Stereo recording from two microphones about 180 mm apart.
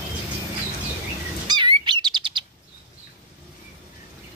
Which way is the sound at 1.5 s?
25° right (ahead or behind).